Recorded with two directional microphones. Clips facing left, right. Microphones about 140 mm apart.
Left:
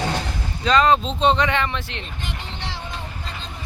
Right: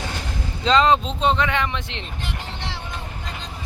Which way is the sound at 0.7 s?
20° right (ahead or behind).